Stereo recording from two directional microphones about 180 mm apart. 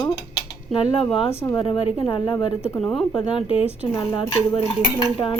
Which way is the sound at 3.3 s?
30° left (ahead or behind).